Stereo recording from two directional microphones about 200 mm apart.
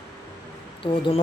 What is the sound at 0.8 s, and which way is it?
Speech, 25° left (ahead or behind).